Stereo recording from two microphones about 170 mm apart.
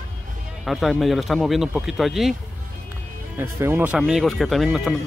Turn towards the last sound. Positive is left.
turn(degrees=0)  # may be behind; listen again after turning